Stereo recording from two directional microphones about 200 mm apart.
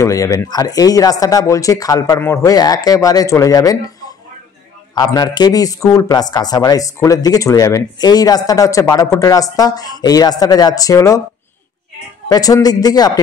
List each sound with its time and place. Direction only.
0.0 s speech: 15° left (ahead or behind)
12.3 s a man's voice: 20° left (ahead or behind)